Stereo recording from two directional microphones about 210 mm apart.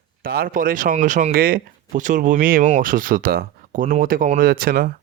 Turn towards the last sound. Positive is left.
turn(degrees=-45)  # may be behind; listen again after turning